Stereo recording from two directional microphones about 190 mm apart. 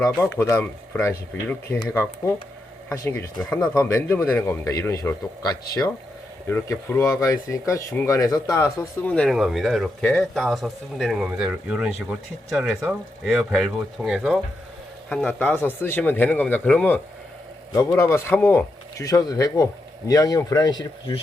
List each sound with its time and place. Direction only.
0.0 s speech: 10° left (ahead or behind)
9.0 s speech: 5° left (ahead or behind); by 21.2 s 20° left (ahead or behind)